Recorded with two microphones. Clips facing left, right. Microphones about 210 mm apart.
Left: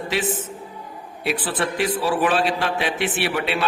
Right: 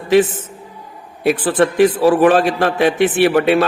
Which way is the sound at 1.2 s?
50° right (ahead or behind).